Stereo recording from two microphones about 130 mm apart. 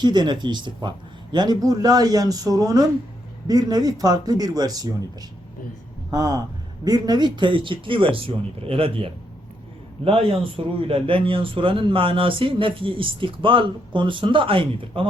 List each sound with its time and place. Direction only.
0.0 s a man's voice: 35° right (ahead or behind)
6.1 s a man's voice: 30° right (ahead or behind)